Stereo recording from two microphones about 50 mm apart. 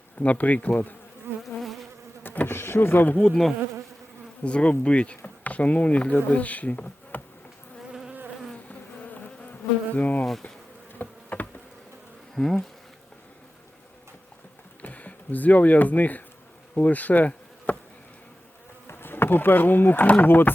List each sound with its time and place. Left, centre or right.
0.2 s bee: left
1.3 s bee: right
1.6 s bee: centre
2.2 s insect: left
2.6 s speech: left
4.4 s speech: left
6.3 s bee: left
8.5 s bee: left
10.9 s insect: left
12.3 s bee: centre
14.8 s speech: left
18.9 s speech: left
20.2 s bee: left